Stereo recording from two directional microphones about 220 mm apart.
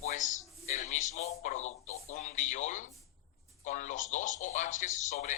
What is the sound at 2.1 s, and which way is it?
A man's voice, 35° left (ahead or behind).